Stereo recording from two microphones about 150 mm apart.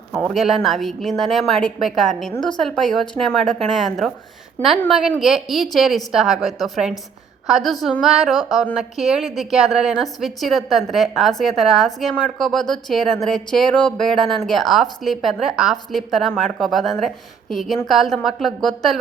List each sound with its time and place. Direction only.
0.2 s a woman's voice: centre (ahead or behind)